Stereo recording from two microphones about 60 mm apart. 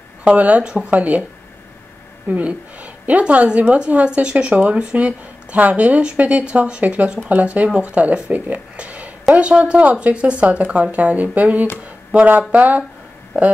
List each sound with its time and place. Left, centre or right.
0.2 s a woman's voice: right
2.2 s a woman's voice: right
8.3 s a sound: right
9.3 s a woman's voice: right